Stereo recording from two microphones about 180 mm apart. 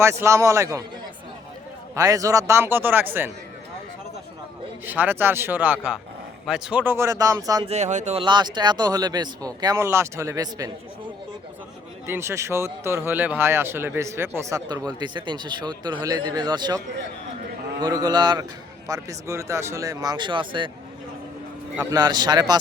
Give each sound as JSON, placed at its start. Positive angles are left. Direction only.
{"t": 0.0, "sound": "a man's voice", "side_deg": -15}
{"t": 2.0, "sound": "a man's voice", "side_deg": -20}
{"t": 4.9, "sound": "a man's voice", "side_deg": -10}
{"t": 7.7, "sound": "speech", "side_deg": -40}
{"t": 8.2, "sound": "a man's voice", "side_deg": -25}
{"t": 12.0, "sound": "a man's voice", "side_deg": -15}
{"t": 17.8, "sound": "speech", "side_deg": -20}
{"t": 21.8, "sound": "speech", "side_deg": -20}